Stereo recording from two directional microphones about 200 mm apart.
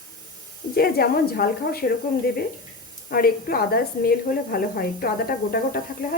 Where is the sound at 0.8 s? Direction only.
50° left (ahead or behind).